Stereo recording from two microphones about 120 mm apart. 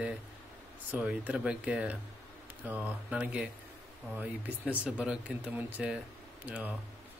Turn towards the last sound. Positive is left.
turn(degrees=-15)  # may be behind; listen again after turning